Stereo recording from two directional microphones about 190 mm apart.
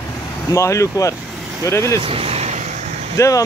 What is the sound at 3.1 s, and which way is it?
Speech, 15° left (ahead or behind).